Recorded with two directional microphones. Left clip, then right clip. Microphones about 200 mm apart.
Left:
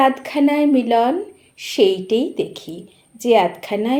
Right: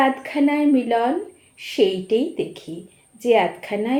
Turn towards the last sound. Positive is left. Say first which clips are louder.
# left 3 dB
turn(degrees=35)  # may be behind; listen again after turning